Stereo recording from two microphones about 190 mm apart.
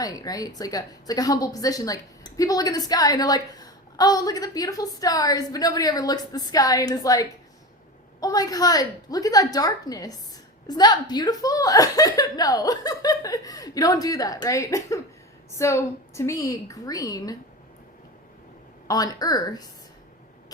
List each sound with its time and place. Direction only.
0.0 s a woman's voice: 20° left (ahead or behind)
18.9 s speech: 20° left (ahead or behind)